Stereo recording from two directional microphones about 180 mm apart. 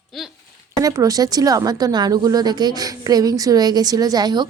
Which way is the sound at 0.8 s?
20° right (ahead or behind).